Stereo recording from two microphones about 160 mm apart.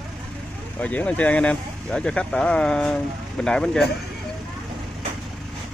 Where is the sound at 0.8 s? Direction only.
10° left (ahead or behind).